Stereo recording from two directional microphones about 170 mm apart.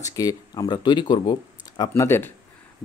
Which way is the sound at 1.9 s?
15° left (ahead or behind).